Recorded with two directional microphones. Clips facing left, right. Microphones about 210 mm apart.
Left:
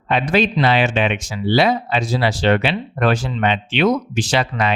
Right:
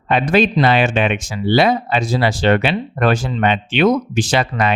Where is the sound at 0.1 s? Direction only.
50° right (ahead or behind).